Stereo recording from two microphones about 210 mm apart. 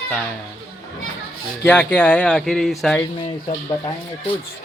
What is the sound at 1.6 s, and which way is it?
Speech, 10° left (ahead or behind).